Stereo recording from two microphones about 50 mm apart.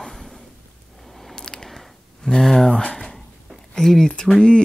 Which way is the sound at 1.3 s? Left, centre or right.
Centre.